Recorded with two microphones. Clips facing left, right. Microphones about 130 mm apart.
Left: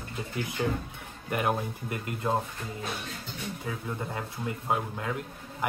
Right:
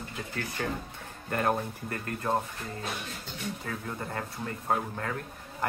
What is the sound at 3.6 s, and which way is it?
Speech, 10° left (ahead or behind).